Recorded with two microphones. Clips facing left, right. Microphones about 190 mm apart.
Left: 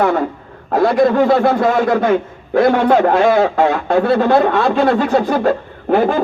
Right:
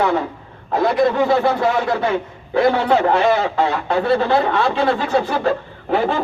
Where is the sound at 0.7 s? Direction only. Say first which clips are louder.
Left 4 dB; 50° left (ahead or behind).